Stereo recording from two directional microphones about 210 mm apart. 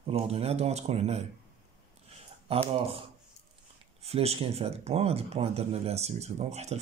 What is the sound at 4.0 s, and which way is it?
Speech, 30° right (ahead or behind).